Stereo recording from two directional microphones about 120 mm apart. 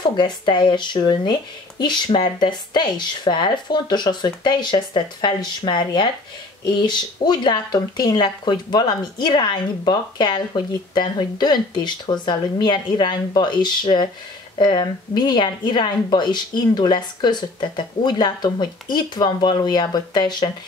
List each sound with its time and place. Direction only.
0.0 s speech: 40° left (ahead or behind)